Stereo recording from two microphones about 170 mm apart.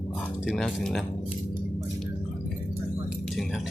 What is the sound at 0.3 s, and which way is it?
Speech, centre (ahead or behind).